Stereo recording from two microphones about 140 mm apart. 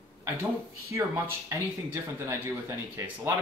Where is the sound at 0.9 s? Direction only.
20° right (ahead or behind).